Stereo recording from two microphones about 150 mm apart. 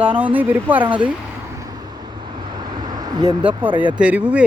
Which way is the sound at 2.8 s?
25° right (ahead or behind).